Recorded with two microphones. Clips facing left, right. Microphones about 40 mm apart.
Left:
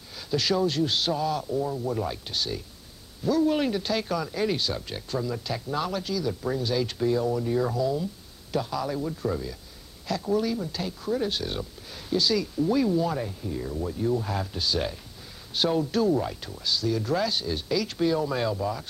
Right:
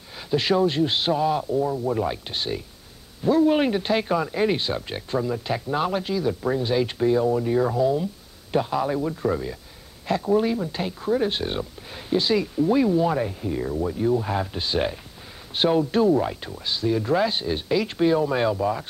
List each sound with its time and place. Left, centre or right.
0.3 s speech: right